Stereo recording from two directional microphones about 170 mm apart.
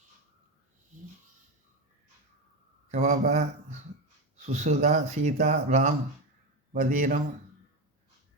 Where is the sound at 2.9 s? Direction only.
45° right (ahead or behind).